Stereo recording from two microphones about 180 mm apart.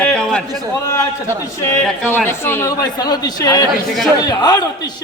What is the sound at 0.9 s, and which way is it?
A man's voice, 15° left (ahead or behind).